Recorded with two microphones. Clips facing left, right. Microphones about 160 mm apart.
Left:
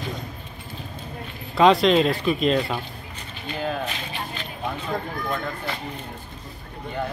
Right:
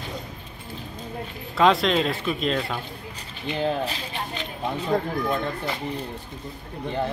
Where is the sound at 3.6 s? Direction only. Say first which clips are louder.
Right 2 dB; 30° right (ahead or behind).